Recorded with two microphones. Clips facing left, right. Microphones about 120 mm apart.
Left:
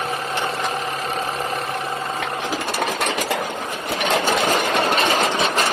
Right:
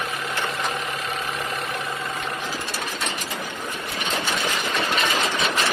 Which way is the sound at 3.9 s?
75° left (ahead or behind).